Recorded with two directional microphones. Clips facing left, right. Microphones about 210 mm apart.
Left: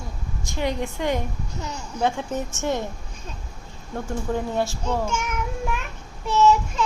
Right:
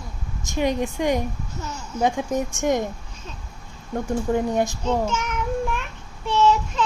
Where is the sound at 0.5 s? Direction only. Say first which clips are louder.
Right 4 dB; 20° right (ahead or behind).